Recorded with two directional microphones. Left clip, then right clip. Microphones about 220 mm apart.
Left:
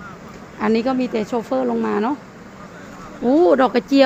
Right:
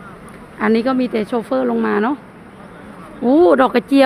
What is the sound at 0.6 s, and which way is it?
Speech, 10° right (ahead or behind).